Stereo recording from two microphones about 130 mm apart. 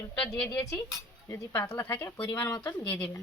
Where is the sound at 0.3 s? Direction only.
15° left (ahead or behind).